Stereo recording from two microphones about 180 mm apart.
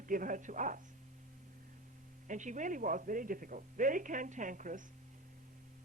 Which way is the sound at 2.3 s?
45° right (ahead or behind).